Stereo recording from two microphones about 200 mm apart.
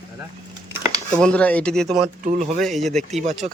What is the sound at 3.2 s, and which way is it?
Speech, 35° right (ahead or behind).